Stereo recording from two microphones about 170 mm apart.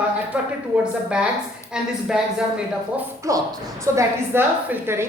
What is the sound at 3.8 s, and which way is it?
A woman's voice, 15° right (ahead or behind).